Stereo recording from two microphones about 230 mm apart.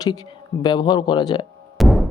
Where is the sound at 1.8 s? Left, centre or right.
Centre.